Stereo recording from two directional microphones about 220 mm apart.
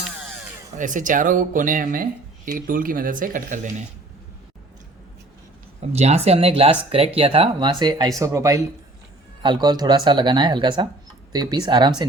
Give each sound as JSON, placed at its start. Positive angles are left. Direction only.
{"t": 0.8, "sound": "speech", "side_deg": -35}
{"t": 5.9, "sound": "speech", "side_deg": -30}